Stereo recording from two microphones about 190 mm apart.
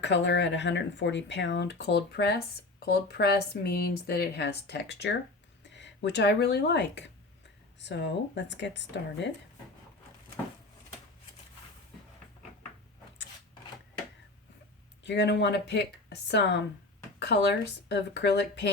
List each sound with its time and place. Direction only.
0.0 s speech: 70° left (ahead or behind)
15.0 s speech: 65° left (ahead or behind)